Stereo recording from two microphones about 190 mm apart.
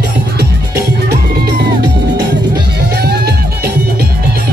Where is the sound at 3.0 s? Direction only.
55° right (ahead or behind).